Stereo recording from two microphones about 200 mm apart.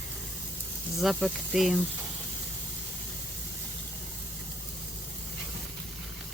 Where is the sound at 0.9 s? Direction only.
Centre (ahead or behind).